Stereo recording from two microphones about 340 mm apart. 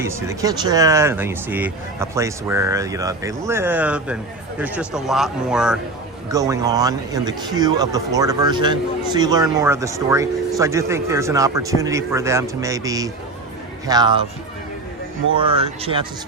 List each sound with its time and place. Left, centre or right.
0.0 s speech: centre
15.4 s speech: centre